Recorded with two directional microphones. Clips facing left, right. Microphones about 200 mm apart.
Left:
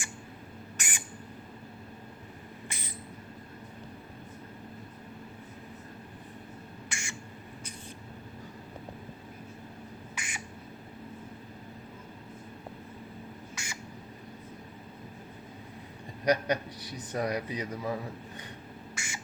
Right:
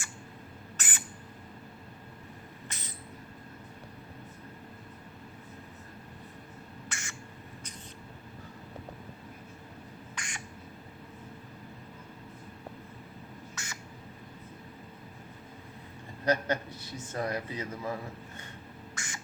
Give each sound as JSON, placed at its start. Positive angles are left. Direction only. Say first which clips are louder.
{"t": 0.8, "sound": "owl", "louder": "even", "side_deg": 15}
{"t": 2.6, "sound": "a sound", "louder": "left 2 dB", "side_deg": 10}
{"t": 6.8, "sound": "bird", "louder": "left 3 dB", "side_deg": 10}
{"t": 10.2, "sound": "squawk", "louder": "left 1 dB", "side_deg": 5}
{"t": 13.6, "sound": "bird", "louder": "left 2 dB", "side_deg": 10}
{"t": 16.2, "sound": "a man's voice", "louder": "left 2 dB", "side_deg": 15}
{"t": 18.9, "sound": "duck", "louder": "left 1 dB", "side_deg": 10}